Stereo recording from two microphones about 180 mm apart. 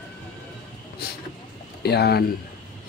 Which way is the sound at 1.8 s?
65° left (ahead or behind).